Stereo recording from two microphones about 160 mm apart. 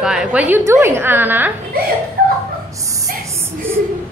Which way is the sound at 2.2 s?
70° right (ahead or behind).